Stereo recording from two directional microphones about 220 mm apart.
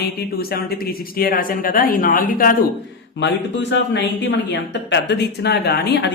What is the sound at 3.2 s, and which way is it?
Speech, 55° left (ahead or behind).